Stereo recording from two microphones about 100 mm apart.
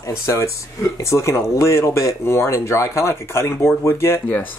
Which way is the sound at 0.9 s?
30° left (ahead or behind).